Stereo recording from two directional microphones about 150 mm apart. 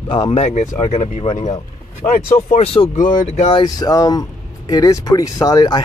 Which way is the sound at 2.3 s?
55° left (ahead or behind).